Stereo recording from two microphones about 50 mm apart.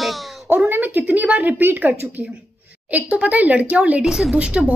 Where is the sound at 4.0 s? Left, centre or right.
Centre.